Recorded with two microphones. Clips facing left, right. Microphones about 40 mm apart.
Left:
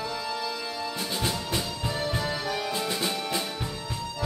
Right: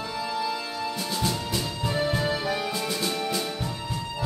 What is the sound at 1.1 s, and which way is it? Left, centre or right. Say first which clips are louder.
Music: right 1 dB; centre.